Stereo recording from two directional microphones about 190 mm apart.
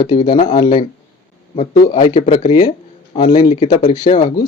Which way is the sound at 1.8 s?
45° left (ahead or behind).